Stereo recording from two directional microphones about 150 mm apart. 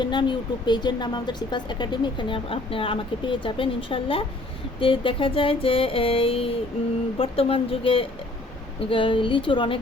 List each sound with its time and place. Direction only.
0.0 s speech: 30° left (ahead or behind)